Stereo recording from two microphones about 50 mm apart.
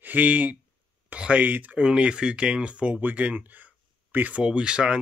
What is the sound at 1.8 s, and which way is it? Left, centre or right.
Speech, right.